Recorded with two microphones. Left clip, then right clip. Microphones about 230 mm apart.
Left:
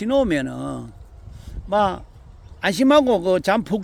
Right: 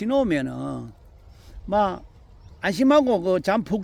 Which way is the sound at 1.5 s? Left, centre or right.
Centre.